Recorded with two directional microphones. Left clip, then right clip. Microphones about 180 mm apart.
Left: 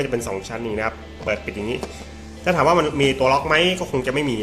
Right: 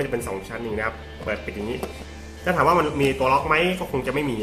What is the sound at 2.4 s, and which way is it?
A man's voice, 30° left (ahead or behind).